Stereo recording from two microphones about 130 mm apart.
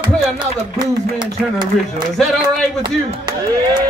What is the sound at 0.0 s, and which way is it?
Speech, 35° right (ahead or behind).